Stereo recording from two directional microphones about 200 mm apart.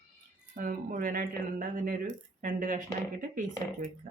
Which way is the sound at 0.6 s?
40° right (ahead or behind).